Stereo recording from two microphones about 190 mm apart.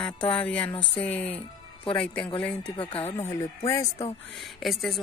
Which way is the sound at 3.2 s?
15° left (ahead or behind).